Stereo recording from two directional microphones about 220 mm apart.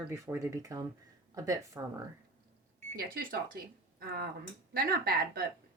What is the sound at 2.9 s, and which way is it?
Speech, 40° right (ahead or behind).